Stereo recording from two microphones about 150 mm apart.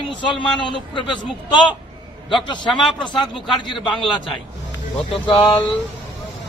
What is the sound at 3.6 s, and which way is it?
Speech, 35° left (ahead or behind).